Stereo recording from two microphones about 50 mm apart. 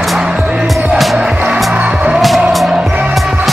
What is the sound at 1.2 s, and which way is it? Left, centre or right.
Music, centre.